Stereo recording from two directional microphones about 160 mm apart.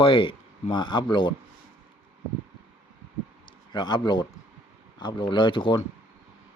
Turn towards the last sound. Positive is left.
turn(degrees=30)  # may be behind; listen again after turning